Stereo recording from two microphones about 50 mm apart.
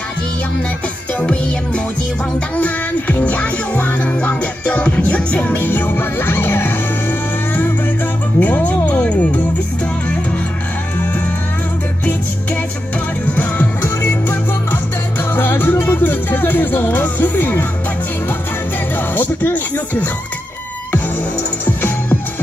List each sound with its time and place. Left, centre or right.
2.5 s music: left
13.3 s music: left
13.8 s music: left
18.9 s speech: left
21.6 s music: left